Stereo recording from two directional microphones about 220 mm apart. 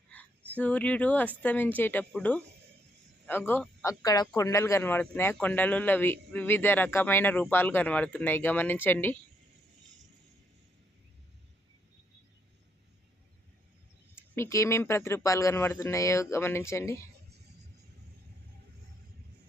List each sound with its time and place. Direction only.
0.1 s a man's voice: 5° left (ahead or behind)
14.2 s a man's voice: 10° left (ahead or behind)